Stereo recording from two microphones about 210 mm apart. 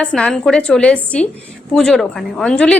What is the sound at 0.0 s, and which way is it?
A woman's voice, 5° left (ahead or behind).